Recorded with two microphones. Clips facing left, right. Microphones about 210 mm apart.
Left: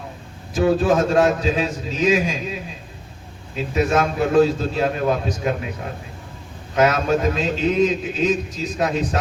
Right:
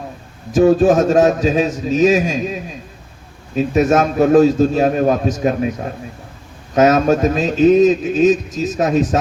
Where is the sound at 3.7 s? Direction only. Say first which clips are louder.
Right 4 dB; 45° right (ahead or behind).